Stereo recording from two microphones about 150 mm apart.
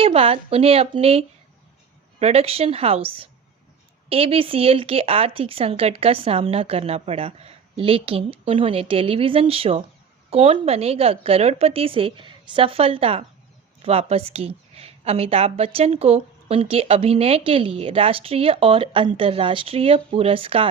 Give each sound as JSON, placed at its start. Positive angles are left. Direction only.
{"t": 0.0, "sound": "a woman's voice", "side_deg": -40}